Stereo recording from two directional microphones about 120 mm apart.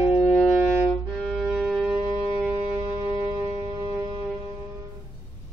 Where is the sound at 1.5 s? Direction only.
5° right (ahead or behind).